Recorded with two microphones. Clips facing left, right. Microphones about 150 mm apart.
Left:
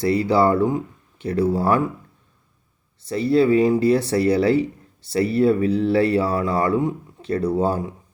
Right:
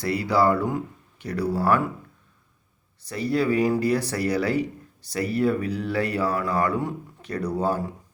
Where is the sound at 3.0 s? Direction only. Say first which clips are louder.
Left 6 dB; 25° left (ahead or behind).